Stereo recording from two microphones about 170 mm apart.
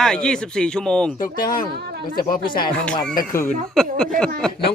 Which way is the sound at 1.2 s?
55° left (ahead or behind).